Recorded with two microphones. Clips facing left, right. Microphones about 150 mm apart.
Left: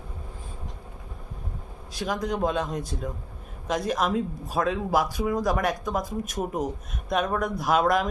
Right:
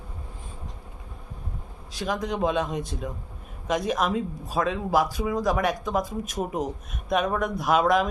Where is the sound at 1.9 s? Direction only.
Centre (ahead or behind).